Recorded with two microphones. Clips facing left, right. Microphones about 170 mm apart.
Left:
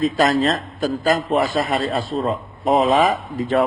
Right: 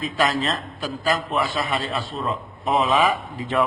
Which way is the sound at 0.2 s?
40° left (ahead or behind).